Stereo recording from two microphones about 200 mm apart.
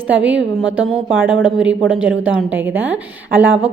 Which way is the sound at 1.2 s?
5° right (ahead or behind).